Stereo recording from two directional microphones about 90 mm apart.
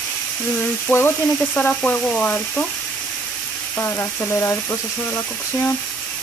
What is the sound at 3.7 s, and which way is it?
Speech, 30° left (ahead or behind).